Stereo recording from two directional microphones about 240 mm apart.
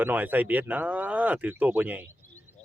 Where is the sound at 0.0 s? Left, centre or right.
Centre.